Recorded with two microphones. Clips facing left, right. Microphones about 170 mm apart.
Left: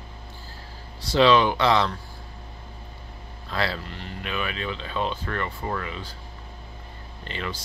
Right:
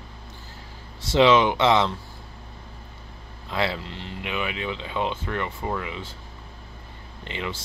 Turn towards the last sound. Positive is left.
turn(degrees=-20)  # may be behind; listen again after turning